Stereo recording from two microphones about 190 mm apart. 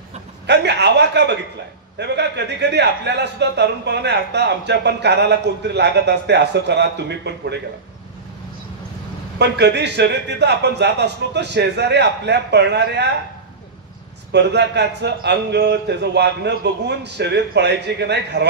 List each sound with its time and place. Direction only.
0.5 s speech: 65° right (ahead or behind)
9.4 s speech: 65° right (ahead or behind)
14.3 s speech: 65° right (ahead or behind)